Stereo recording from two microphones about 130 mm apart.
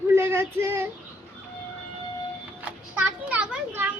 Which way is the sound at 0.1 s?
20° right (ahead or behind).